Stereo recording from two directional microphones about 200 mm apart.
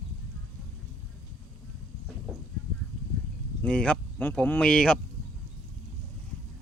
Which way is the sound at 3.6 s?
5° left (ahead or behind).